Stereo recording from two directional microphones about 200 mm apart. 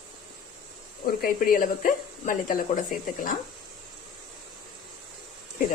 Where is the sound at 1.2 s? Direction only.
45° left (ahead or behind).